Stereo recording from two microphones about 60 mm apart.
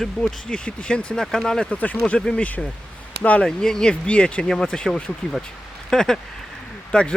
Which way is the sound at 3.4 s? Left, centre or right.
Centre.